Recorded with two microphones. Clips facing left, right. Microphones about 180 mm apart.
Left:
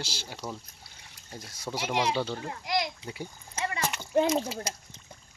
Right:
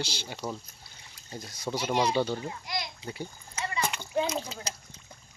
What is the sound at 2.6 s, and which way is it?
Speech, 90° left.